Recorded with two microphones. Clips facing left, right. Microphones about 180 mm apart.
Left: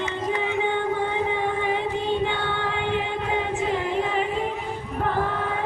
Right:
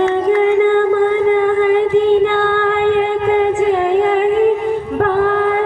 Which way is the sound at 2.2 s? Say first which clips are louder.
Right 12 dB; 60° right (ahead or behind).